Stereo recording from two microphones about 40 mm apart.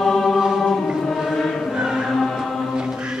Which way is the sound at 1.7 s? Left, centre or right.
Centre.